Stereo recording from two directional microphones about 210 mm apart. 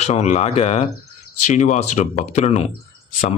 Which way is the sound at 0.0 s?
30° left (ahead or behind).